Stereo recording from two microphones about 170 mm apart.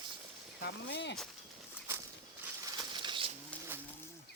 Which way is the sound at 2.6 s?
25° right (ahead or behind).